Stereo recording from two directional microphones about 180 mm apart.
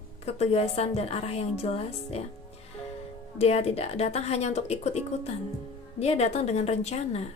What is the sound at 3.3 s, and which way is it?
A woman's voice, 35° left (ahead or behind).